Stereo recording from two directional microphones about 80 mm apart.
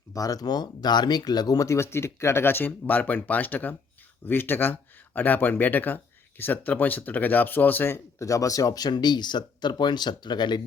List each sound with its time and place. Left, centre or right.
0.1 s speech: left
1.6 s speech: left